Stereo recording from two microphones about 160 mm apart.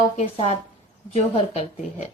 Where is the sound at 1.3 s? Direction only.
40° left (ahead or behind).